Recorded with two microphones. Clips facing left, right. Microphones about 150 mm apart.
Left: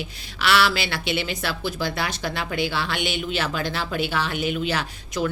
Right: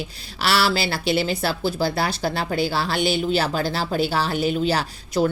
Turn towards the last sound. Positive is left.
turn(degrees=-35)  # may be behind; listen again after turning